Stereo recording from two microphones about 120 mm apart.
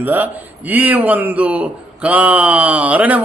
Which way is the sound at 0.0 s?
15° right (ahead or behind).